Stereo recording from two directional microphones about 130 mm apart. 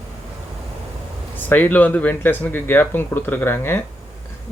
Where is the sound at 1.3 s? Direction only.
15° left (ahead or behind).